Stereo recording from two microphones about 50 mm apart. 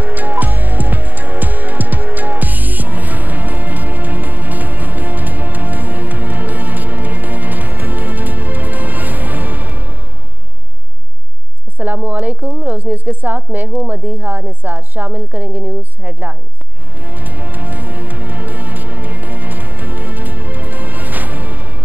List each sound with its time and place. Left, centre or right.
0.0 s music: right
11.8 s a sound: right
17.0 s music: right